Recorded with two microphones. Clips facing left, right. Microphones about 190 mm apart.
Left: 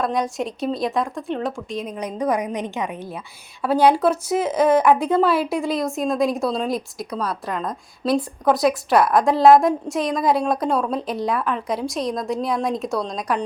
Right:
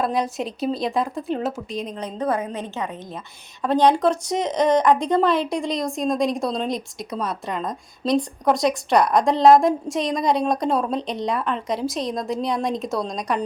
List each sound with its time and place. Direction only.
0.0 s speech: centre (ahead or behind)
2.0 s a woman's voice: 10° left (ahead or behind)